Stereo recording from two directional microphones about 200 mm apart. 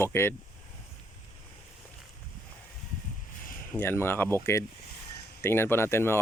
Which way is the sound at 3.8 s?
10° left (ahead or behind).